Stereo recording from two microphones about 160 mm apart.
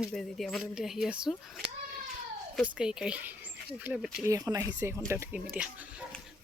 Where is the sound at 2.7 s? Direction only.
5° right (ahead or behind).